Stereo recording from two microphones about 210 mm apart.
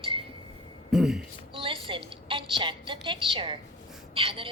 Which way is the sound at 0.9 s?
Centre (ahead or behind).